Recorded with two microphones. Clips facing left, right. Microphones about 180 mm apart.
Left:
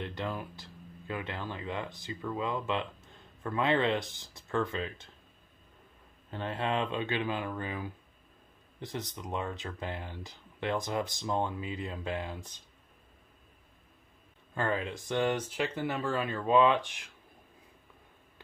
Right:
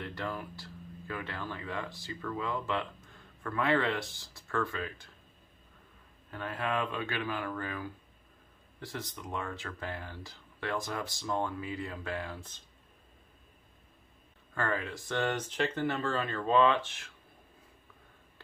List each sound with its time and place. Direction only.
0.0 s speech: 20° left (ahead or behind)
6.3 s speech: 25° left (ahead or behind)
14.5 s speech: 20° left (ahead or behind)